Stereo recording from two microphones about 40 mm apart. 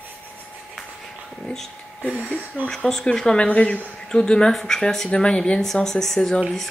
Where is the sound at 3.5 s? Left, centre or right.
Left.